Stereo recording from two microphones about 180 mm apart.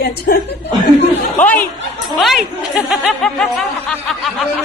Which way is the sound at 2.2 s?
Centre (ahead or behind).